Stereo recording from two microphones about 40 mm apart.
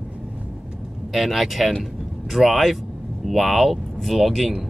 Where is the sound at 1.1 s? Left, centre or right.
Centre.